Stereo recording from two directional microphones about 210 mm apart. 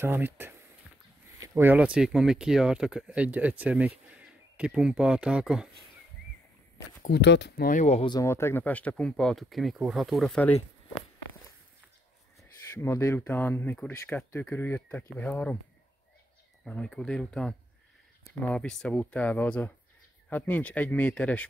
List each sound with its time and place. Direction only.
0.0 s speech: 10° right (ahead or behind)
7.1 s speech: 55° left (ahead or behind); by 8.1 s 35° left (ahead or behind)
8.1 s speech: 15° left (ahead or behind)
12.8 s speech: 10° left (ahead or behind)
16.6 s speech: 5° left (ahead or behind)